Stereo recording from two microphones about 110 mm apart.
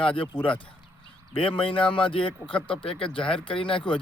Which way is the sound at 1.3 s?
55° left (ahead or behind).